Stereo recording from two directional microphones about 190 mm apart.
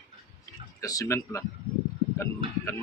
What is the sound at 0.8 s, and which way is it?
Speech, 20° left (ahead or behind).